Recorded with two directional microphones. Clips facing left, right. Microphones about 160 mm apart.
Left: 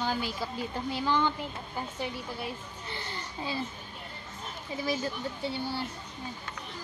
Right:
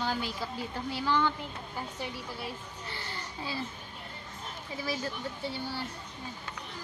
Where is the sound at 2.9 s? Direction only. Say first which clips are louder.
Left 3 dB; 20° left (ahead or behind).